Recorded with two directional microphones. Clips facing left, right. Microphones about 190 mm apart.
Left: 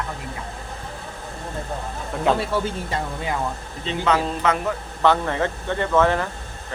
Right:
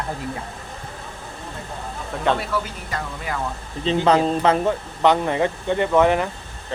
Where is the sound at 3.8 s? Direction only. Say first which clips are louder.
Right 5 dB; 35° right (ahead or behind).